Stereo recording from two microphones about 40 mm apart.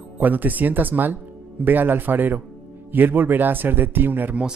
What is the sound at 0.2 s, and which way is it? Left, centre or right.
Speech, right.